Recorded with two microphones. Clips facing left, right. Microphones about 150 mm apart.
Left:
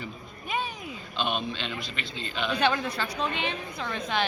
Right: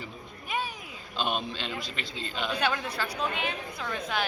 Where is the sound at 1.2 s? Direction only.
40° right (ahead or behind).